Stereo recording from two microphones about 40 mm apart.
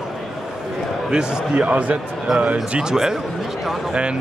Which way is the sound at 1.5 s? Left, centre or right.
Right.